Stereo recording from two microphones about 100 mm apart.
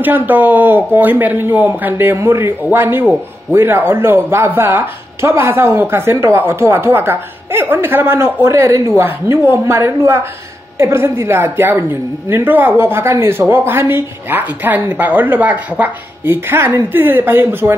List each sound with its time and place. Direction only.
0.0 s speech: 20° right (ahead or behind)